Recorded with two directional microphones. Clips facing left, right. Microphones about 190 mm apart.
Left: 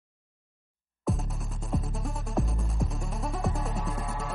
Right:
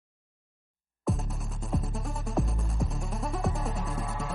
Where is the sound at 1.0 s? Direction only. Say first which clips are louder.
Even; centre (ahead or behind).